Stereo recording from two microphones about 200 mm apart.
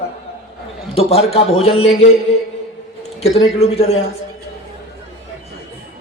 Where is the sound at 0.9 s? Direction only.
30° left (ahead or behind).